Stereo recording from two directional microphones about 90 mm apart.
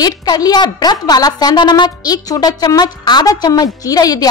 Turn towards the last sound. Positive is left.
turn(degrees=45)  # may be behind; listen again after turning